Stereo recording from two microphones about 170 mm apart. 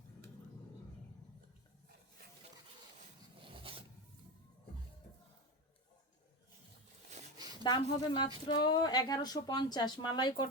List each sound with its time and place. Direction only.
3.5 s filing: 30° right (ahead or behind)
7.6 s speech: 30° left (ahead or behind)